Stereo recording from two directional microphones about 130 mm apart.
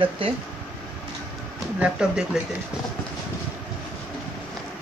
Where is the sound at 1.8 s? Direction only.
5° right (ahead or behind).